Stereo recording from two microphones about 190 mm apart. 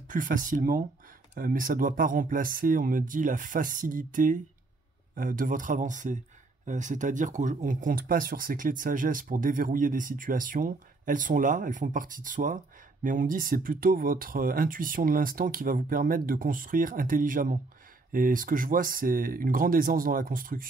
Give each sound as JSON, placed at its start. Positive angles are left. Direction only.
{"t": 0.1, "sound": "speech", "side_deg": -45}